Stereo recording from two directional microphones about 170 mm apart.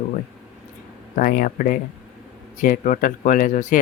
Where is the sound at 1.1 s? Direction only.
55° left (ahead or behind).